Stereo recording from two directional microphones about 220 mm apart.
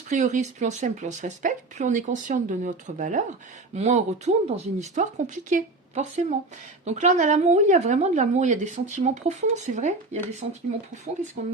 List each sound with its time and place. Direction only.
0.1 s speech: 35° right (ahead or behind)
11.4 s speech: 40° right (ahead or behind)